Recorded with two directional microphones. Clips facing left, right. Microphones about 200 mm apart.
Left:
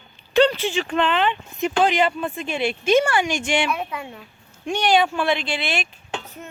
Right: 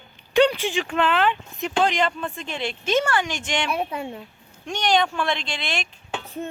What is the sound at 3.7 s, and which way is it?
Speech, 30° right (ahead or behind).